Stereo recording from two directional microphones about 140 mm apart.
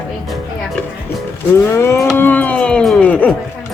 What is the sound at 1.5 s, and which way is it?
Speech, 20° left (ahead or behind).